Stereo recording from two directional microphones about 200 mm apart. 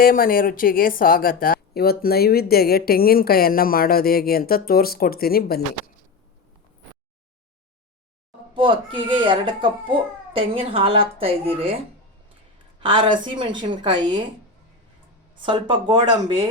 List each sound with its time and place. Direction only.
0.0 s a woman's voice: 45° left (ahead or behind)
8.5 s speech: 25° right (ahead or behind)
12.8 s speech: 25° right (ahead or behind)
15.4 s speech: 25° right (ahead or behind)